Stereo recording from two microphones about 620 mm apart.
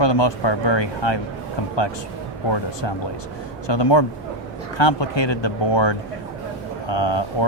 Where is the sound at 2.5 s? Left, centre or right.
Left.